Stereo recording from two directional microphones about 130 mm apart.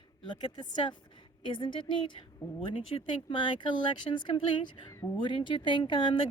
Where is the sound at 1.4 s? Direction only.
40° left (ahead or behind).